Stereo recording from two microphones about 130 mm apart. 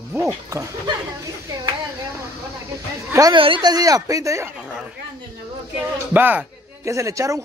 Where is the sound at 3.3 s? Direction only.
40° right (ahead or behind); by 4.4 s 25° right (ahead or behind).